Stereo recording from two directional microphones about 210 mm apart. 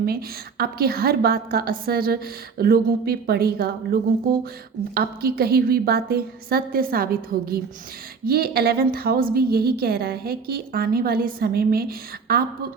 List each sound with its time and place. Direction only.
0.6 s a woman's voice: 45° right (ahead or behind)